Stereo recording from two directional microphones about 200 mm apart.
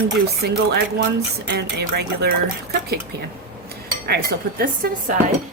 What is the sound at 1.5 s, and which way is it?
Speech, 55° right (ahead or behind).